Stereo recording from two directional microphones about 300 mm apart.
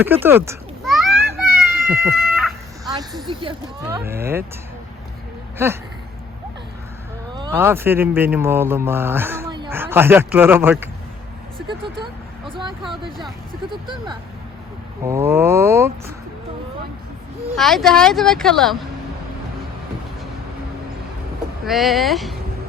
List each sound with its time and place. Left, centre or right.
0.0 s a sound: centre
2.8 s speech: centre
5.6 s speech: centre
7.3 s speech: centre
12.8 s speech: centre
13.7 s speech: centre
17.6 s speech: centre
21.6 s speech: centre